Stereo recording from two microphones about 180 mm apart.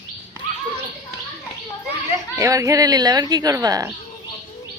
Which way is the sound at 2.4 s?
15° right (ahead or behind).